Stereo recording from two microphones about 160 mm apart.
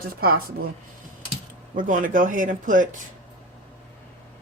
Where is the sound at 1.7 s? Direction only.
55° right (ahead or behind).